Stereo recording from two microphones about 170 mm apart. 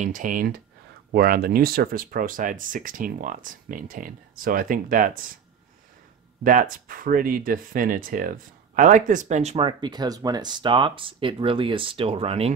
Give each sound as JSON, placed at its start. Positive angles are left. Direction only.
{"t": 0.0, "sound": "speech", "side_deg": -50}
{"t": 6.4, "sound": "speech", "side_deg": -55}